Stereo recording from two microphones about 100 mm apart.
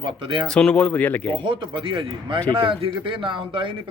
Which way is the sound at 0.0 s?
55° right (ahead or behind).